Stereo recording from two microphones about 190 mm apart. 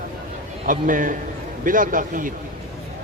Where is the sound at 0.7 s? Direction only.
45° right (ahead or behind).